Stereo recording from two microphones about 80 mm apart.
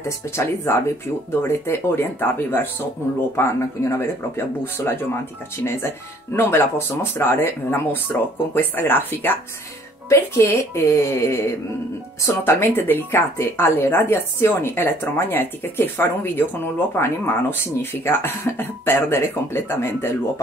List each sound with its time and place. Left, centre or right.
0.4 s speech: left
10.0 s speech: left